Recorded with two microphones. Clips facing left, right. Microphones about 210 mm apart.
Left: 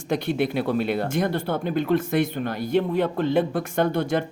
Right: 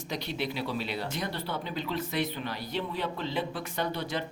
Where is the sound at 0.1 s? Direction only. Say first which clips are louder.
Left 11 dB; 50° left (ahead or behind).